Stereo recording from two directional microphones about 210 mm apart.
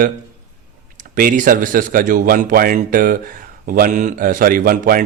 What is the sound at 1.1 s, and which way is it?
A man's voice, 40° right (ahead or behind).